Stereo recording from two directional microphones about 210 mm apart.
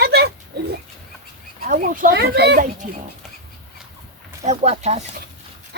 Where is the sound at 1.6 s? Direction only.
45° right (ahead or behind).